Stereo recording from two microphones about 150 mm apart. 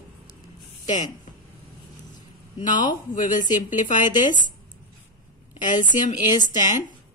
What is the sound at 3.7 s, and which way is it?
Speech, 60° left (ahead or behind).